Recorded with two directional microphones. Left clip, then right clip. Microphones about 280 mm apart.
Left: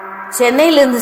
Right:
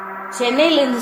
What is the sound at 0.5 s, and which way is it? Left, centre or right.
Speech, left.